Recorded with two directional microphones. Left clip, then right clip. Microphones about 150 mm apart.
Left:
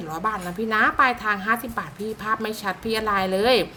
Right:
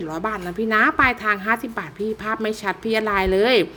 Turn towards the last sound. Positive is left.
turn(degrees=-35)  # may be behind; listen again after turning